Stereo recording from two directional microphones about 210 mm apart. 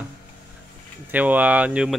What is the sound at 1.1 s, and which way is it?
Speech, 5° right (ahead or behind).